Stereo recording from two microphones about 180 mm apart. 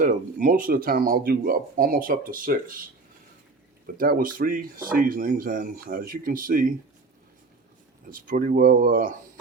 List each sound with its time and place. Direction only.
0.0 s speech: 45° right (ahead or behind)
3.9 s speech: 55° right (ahead or behind)
8.1 s speech: 50° right (ahead or behind)